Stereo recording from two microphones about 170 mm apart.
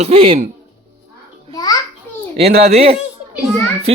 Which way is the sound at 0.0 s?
35° right (ahead or behind).